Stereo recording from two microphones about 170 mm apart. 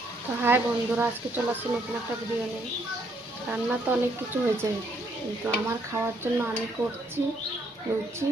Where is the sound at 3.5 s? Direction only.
10° right (ahead or behind).